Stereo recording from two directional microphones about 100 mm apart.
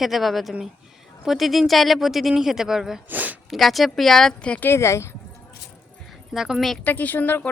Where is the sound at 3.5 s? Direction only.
Centre (ahead or behind).